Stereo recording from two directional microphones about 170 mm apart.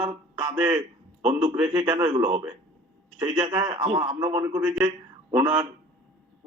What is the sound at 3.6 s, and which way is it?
A man's voice, 30° right (ahead or behind).